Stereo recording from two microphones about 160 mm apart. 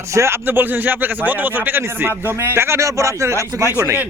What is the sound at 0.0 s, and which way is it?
Speech, 20° right (ahead or behind).